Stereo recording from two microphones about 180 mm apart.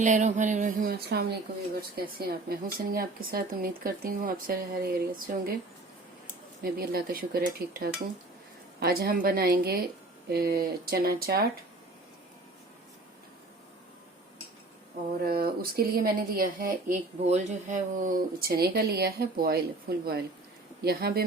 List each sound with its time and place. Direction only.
0.0 s speech: 40° right (ahead or behind)
6.6 s speech: 55° right (ahead or behind)
15.2 s speech: 55° right (ahead or behind)
17.2 s speech: 40° right (ahead or behind); by 21.2 s 60° right (ahead or behind)